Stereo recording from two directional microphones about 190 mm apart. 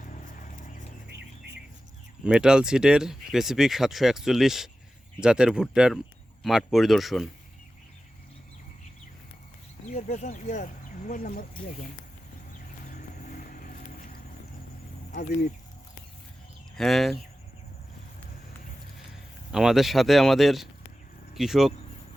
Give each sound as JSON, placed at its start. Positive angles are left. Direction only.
{"t": 0.0, "sound": "a sound", "side_deg": 45}
{"t": 2.2, "sound": "speech", "side_deg": -5}
{"t": 10.1, "sound": "speech", "side_deg": 40}
{"t": 12.9, "sound": "vehicle", "side_deg": 50}
{"t": 15.1, "sound": "speech", "side_deg": 40}
{"t": 16.7, "sound": "speech", "side_deg": 0}
{"t": 19.5, "sound": "speech", "side_deg": -5}